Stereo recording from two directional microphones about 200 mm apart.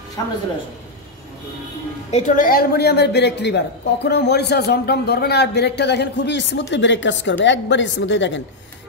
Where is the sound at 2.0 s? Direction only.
35° left (ahead or behind).